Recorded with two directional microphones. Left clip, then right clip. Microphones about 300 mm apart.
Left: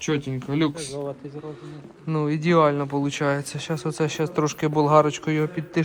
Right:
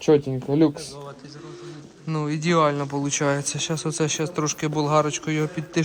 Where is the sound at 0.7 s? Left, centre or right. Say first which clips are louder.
Left 4 dB; left.